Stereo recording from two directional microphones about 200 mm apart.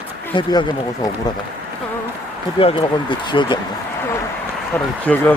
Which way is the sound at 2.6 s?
25° left (ahead or behind).